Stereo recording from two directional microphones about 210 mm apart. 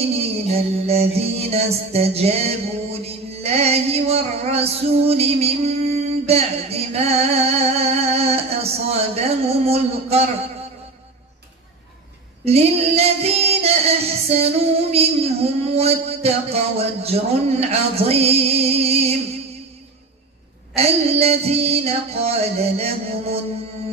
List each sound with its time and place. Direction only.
0.1 s music: 30° right (ahead or behind)
12.4 s singing: 30° right (ahead or behind)
20.7 s speech: 30° right (ahead or behind)